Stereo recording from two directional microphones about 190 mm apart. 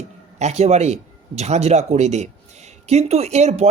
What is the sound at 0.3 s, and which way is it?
Speech, 35° right (ahead or behind).